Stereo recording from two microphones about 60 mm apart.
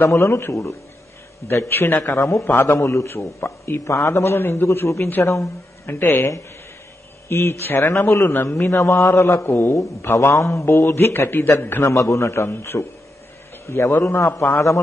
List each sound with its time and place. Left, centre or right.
0.0 s a man's voice: left
2.1 s a man's voice: left
4.6 s a man's voice: left
5.2 s a man's voice: left
5.9 s a man's voice: left
10.1 s a man's voice: left
10.6 s speech: left
11.9 s a man's voice: left